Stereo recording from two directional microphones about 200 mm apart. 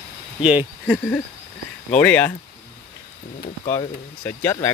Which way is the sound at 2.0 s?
10° left (ahead or behind).